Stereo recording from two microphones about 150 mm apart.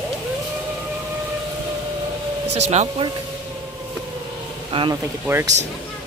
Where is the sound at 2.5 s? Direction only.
45° right (ahead or behind).